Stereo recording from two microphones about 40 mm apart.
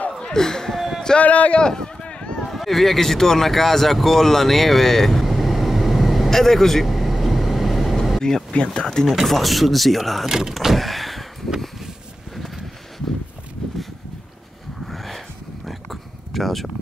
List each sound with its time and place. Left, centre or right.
0.2 s a sound: centre
1.1 s speech: left
1.6 s a sound: centre
2.4 s speech: centre
5.2 s vehicle: centre
8.6 s speech: centre
9.0 s speech: centre
10.2 s vehicle: centre
14.9 s a sound: centre